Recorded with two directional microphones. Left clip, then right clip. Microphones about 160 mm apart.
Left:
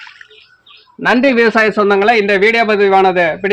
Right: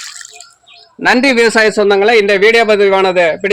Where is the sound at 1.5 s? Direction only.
60° left (ahead or behind).